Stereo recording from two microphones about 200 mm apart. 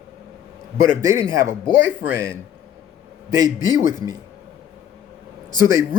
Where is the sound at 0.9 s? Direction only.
15° right (ahead or behind).